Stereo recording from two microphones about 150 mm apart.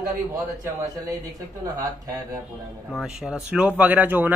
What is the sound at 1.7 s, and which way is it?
Speech, 25° right (ahead or behind).